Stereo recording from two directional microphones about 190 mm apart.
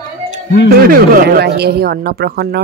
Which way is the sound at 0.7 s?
50° right (ahead or behind).